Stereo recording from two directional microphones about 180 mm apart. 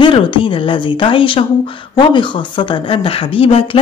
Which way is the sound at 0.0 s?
25° left (ahead or behind).